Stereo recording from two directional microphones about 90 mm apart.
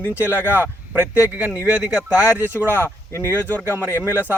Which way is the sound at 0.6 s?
20° right (ahead or behind).